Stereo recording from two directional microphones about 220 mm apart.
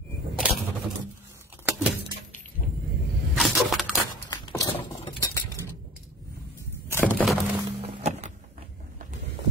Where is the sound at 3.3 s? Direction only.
Centre (ahead or behind).